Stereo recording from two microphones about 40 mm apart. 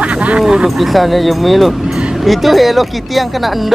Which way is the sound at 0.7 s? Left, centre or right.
Centre.